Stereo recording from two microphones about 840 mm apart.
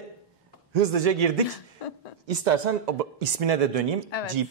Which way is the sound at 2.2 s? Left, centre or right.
Right.